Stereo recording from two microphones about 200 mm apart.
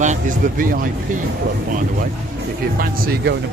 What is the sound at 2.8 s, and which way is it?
Speech, 50° right (ahead or behind).